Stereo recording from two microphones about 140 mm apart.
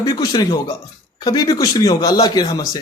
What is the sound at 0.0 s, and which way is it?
A man's voice, 25° left (ahead or behind).